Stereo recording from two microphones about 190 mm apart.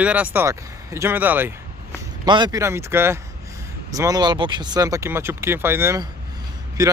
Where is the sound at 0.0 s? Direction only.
5° right (ahead or behind).